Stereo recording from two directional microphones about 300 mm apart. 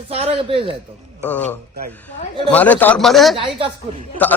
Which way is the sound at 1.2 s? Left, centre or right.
Centre.